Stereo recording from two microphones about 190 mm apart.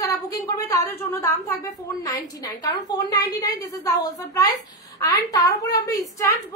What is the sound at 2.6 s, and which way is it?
A woman's voice, 20° left (ahead or behind).